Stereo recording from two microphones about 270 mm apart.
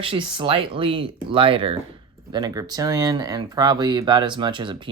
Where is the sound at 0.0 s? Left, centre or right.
Centre.